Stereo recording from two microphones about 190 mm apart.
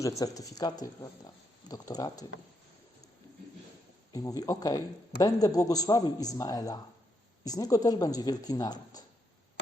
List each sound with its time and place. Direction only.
0.0 s speech: 15° left (ahead or behind)
4.1 s speech: 20° left (ahead or behind)